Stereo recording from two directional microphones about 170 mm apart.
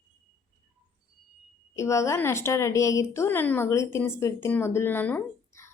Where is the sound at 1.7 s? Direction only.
15° left (ahead or behind).